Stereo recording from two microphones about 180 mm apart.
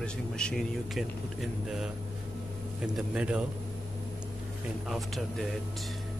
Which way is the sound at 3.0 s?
5° right (ahead or behind).